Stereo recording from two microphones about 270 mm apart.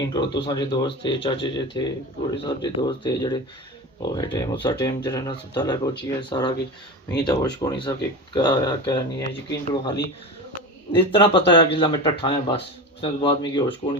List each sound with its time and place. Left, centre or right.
0.1 s speech: centre